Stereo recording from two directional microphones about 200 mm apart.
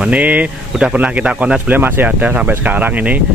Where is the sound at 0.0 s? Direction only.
5° right (ahead or behind).